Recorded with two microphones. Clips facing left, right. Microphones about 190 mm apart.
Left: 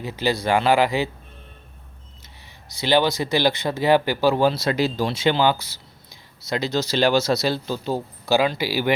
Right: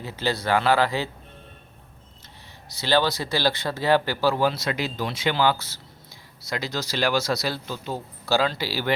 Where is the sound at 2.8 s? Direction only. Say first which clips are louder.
Left 3 dB; 15° left (ahead or behind).